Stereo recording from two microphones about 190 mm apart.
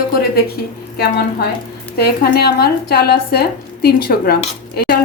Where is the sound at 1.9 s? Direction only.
55° left (ahead or behind).